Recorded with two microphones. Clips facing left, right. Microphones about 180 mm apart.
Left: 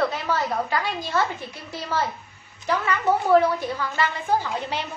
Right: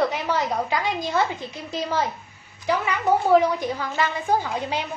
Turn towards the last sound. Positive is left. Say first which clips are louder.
# right 1 dB
turn(degrees=-15)  # may be behind; listen again after turning